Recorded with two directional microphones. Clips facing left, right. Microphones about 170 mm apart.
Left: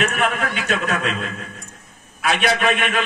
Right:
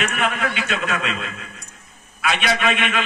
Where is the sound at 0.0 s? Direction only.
45° left (ahead or behind).